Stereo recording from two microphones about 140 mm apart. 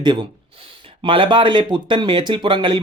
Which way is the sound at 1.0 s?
35° right (ahead or behind).